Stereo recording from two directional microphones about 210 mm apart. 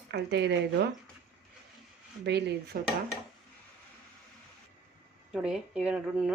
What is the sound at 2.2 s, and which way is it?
Speech, 55° right (ahead or behind).